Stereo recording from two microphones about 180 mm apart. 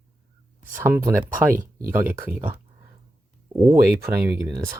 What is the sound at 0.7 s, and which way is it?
Speech, 15° right (ahead or behind).